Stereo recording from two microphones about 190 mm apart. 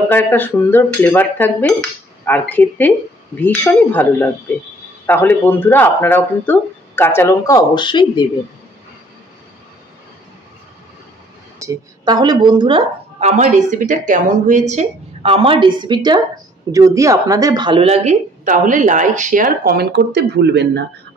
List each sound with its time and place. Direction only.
0.1 s speech: 10° left (ahead or behind)
11.6 s a woman's voice: 20° right (ahead or behind); by 20.8 s 65° right (ahead or behind)